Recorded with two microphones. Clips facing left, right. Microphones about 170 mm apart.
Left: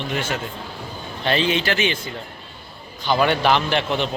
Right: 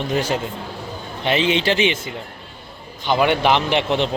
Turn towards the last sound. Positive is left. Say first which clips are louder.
# right 3 dB
turn(degrees=-25)  # may be behind; listen again after turning